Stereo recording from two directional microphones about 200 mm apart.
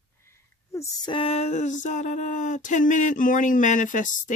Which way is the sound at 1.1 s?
30° left (ahead or behind).